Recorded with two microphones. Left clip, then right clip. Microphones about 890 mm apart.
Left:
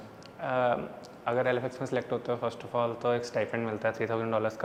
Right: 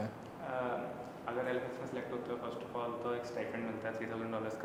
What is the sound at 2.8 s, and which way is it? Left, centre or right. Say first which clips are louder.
Speech: left 10 dB; left.